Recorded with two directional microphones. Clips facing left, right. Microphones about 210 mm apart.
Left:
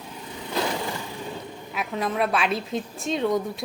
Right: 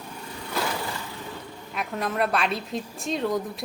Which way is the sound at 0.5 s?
20° left (ahead or behind).